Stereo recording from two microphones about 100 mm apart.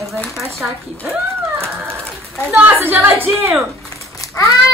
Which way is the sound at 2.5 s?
20° right (ahead or behind).